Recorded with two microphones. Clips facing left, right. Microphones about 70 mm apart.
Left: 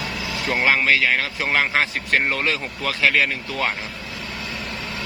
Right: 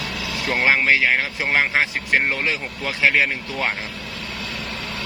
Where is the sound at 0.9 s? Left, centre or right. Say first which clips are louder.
Right 1 dB; right.